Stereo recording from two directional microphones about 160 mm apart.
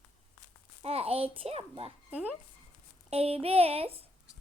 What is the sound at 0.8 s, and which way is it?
A child's voice, 40° right (ahead or behind).